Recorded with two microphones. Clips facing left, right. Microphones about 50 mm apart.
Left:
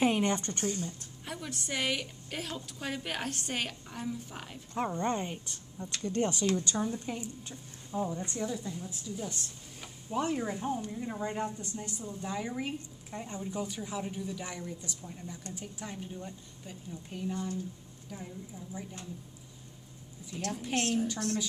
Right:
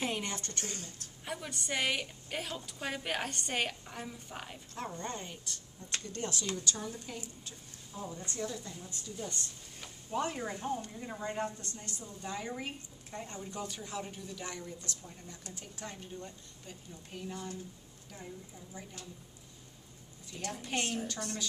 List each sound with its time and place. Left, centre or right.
0.0 s speech: left
1.2 s a woman's voice: centre
4.7 s speech: left
8.4 s a woman's voice: centre
20.2 s a woman's voice: centre